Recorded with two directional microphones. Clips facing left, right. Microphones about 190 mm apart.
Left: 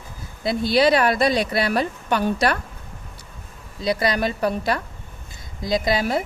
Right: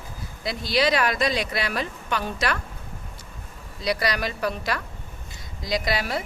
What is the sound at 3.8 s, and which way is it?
A woman's voice, 25° left (ahead or behind).